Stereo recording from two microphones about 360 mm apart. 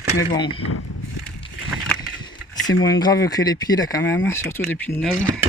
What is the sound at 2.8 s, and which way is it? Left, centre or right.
Speech, centre.